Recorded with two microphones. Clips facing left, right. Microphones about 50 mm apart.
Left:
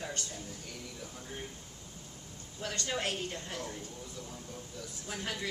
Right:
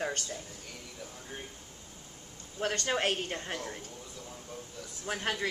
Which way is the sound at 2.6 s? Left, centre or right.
Right.